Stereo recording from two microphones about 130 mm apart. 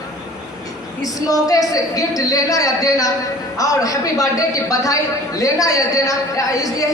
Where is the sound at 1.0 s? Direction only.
25° left (ahead or behind).